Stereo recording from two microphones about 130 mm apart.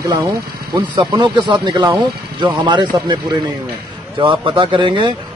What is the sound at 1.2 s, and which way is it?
Speech, 35° right (ahead or behind).